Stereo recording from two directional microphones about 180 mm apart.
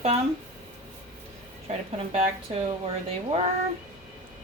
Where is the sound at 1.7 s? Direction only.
35° right (ahead or behind).